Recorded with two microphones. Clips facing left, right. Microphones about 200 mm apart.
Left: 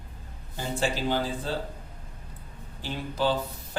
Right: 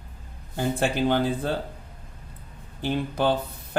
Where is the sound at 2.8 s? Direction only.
60° right (ahead or behind).